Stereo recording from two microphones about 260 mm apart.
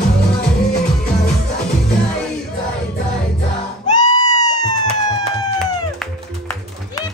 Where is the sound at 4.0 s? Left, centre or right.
Centre.